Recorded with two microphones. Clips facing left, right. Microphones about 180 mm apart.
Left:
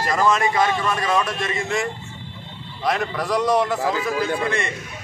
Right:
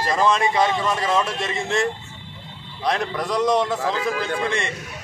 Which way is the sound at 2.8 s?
Centre (ahead or behind).